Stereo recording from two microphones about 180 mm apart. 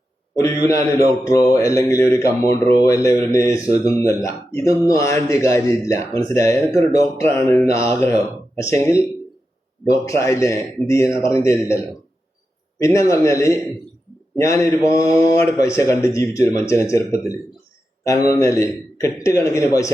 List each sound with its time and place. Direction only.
0.3 s speech: 15° left (ahead or behind)
12.8 s speech: 15° left (ahead or behind)